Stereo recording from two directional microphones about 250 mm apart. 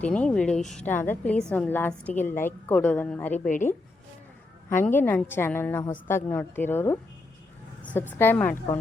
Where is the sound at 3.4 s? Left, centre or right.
Left.